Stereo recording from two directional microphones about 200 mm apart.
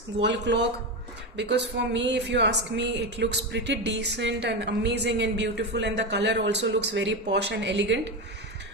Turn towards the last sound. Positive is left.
turn(degrees=-60)  # may be behind; listen again after turning